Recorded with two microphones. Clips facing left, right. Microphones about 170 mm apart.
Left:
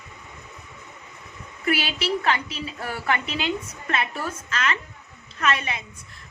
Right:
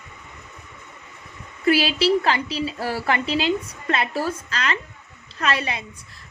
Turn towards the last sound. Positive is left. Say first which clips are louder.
# right 1 dB
turn(degrees=-35)  # may be behind; listen again after turning